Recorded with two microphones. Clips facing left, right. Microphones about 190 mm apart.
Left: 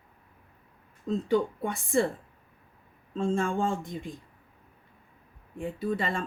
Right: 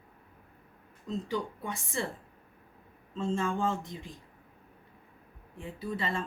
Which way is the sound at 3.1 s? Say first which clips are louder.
Left 4 dB; 50° left (ahead or behind).